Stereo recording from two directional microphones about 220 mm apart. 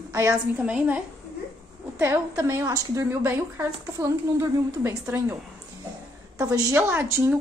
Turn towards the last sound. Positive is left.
turn(degrees=-10)  # may be behind; listen again after turning